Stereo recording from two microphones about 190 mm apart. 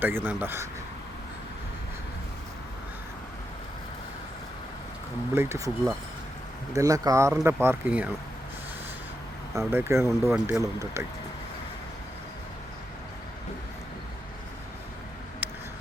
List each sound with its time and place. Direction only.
0.0 s speech: 10° right (ahead or behind)
5.3 s speech: 15° right (ahead or behind)
6.7 s speech: 20° right (ahead or behind)
9.6 s speech: 10° right (ahead or behind)
15.4 s a sound: 10° right (ahead or behind)